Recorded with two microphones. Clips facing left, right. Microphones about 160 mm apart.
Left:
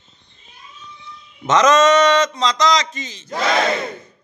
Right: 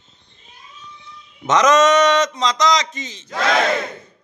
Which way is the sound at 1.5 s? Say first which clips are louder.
Left 1 dB; 15° right (ahead or behind).